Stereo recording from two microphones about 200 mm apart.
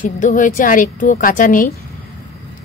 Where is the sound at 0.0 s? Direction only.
40° left (ahead or behind).